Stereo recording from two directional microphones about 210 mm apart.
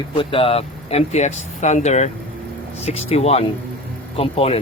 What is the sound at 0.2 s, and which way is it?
Speech, 25° left (ahead or behind).